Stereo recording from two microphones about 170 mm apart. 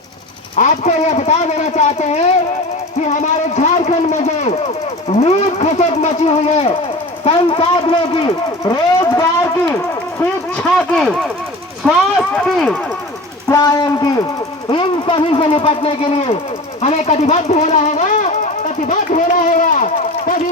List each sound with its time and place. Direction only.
0.5 s speech: 45° left (ahead or behind)
3.1 s a sound: 45° left (ahead or behind)
5.0 s speech: 40° left (ahead or behind)
8.6 s a sound: 25° left (ahead or behind)
10.8 s speech: centre (ahead or behind)
13.5 s speech: 20° left (ahead or behind); by 20.4 s 50° left (ahead or behind)